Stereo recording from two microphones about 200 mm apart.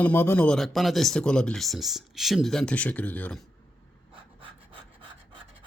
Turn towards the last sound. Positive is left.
turn(degrees=-25)  # may be behind; listen again after turning